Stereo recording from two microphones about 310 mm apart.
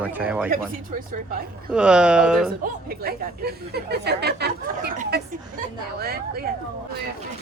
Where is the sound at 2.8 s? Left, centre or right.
Right.